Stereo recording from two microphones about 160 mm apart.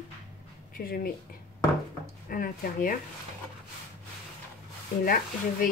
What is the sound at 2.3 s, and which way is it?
Speech, 60° left (ahead or behind).